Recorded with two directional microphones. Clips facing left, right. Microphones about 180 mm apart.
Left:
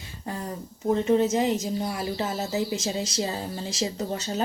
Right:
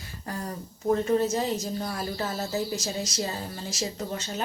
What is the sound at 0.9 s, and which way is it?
Speech, 20° left (ahead or behind).